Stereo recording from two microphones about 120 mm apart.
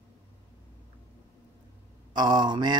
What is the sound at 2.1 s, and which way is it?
Speech, 35° right (ahead or behind).